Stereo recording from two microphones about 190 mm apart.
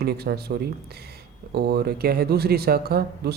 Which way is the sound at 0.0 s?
55° right (ahead or behind).